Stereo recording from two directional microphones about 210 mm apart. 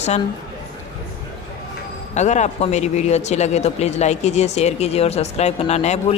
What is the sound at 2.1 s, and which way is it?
Speech, 35° left (ahead or behind).